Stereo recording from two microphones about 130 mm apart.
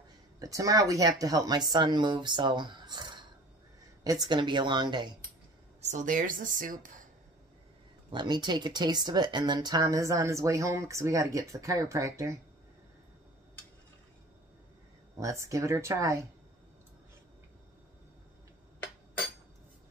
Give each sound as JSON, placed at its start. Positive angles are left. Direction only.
{"t": 0.4, "sound": "speech", "side_deg": -25}
{"t": 5.8, "sound": "speech", "side_deg": -65}
{"t": 8.1, "sound": "speech", "side_deg": -35}
{"t": 15.1, "sound": "speech", "side_deg": -25}